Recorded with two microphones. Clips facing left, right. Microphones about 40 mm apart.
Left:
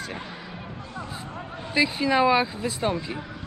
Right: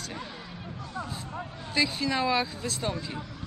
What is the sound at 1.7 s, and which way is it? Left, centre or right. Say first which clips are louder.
Speech: left 6 dB; centre.